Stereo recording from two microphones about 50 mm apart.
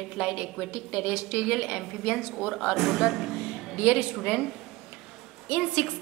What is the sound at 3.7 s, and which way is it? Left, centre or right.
Speech, right.